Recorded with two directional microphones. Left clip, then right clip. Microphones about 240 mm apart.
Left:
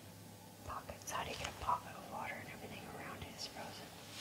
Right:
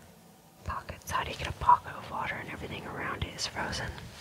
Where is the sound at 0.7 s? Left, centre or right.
Right.